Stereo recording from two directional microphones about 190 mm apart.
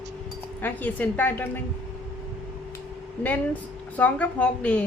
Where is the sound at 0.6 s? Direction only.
10° left (ahead or behind).